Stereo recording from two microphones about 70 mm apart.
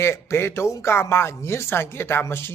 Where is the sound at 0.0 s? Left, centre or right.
Left.